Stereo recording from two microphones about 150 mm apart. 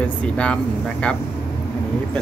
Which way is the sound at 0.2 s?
10° left (ahead or behind).